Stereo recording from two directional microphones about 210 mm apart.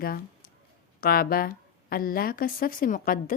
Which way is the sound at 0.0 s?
45° left (ahead or behind).